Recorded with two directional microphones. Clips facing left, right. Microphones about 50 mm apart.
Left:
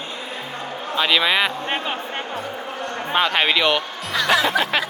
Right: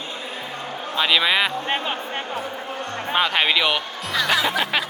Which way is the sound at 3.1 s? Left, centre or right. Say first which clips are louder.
Left 1 dB; centre.